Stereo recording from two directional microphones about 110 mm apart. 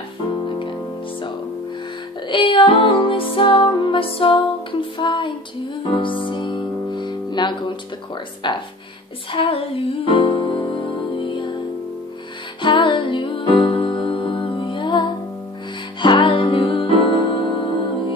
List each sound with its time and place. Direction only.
0.5 s music: 50° left (ahead or behind)
2.2 s music: 50° left (ahead or behind)
8.4 s speech: 45° left (ahead or behind)
9.3 s music: 50° left (ahead or behind)
12.6 s music: 45° left (ahead or behind)
16.0 s music: 45° left (ahead or behind)